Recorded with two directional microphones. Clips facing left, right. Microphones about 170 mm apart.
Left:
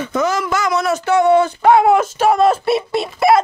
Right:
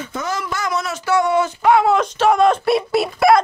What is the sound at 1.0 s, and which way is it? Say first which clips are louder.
Speech: left 4 dB; 25° left (ahead or behind).